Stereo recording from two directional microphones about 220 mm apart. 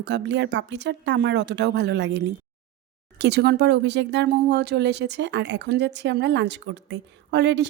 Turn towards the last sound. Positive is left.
turn(degrees=-50)  # may be behind; listen again after turning